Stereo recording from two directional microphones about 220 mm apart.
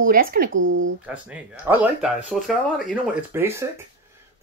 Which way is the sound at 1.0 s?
5° right (ahead or behind).